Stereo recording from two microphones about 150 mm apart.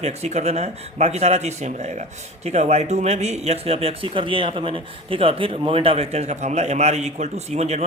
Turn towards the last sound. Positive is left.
turn(degrees=-45)  # may be behind; listen again after turning